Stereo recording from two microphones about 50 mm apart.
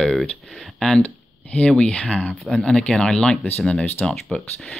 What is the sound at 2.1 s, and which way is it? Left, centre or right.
Speech, centre.